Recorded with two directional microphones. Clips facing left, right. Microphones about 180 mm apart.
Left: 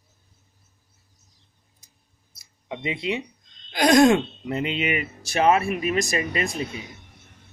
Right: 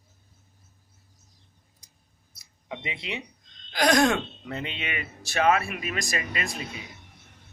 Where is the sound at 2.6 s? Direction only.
25° left (ahead or behind).